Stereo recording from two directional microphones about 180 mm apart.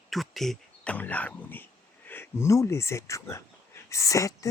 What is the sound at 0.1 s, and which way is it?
Speech, centre (ahead or behind).